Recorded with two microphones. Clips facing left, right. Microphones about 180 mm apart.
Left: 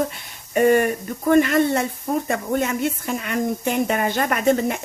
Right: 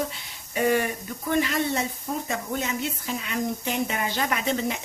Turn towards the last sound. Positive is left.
turn(degrees=50)  # may be behind; listen again after turning